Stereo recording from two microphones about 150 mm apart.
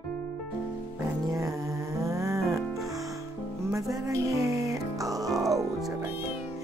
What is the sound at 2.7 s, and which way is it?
Music, centre (ahead or behind).